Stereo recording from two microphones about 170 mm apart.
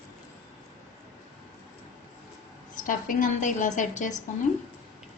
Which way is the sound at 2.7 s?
50° left (ahead or behind).